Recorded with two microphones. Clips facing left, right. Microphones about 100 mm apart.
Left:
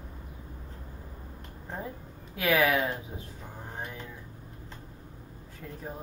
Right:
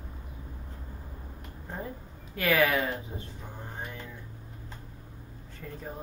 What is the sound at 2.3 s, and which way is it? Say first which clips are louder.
Speech: even; 5° left (ahead or behind).